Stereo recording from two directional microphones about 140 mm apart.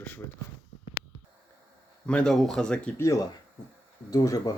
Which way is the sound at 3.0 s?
25° left (ahead or behind).